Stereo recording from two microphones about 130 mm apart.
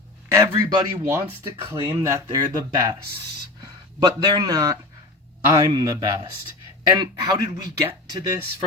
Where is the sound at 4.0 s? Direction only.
35° right (ahead or behind).